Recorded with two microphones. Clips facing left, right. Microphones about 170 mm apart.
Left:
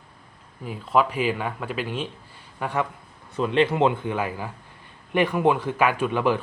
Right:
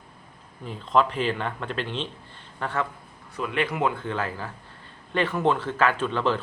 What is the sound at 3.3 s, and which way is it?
A man's voice, 30° left (ahead or behind).